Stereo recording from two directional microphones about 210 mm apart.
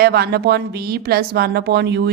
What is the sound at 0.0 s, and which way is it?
A woman's voice, 50° right (ahead or behind).